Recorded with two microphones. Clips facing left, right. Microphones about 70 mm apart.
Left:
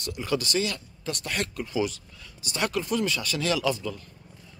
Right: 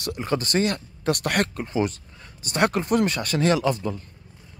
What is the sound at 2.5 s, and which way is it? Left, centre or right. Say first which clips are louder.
Speech: right 6 dB; right.